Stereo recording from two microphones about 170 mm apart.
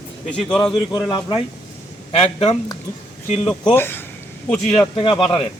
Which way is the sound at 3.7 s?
15° left (ahead or behind).